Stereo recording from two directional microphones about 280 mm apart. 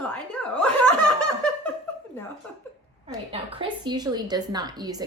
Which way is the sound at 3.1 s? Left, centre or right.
Centre.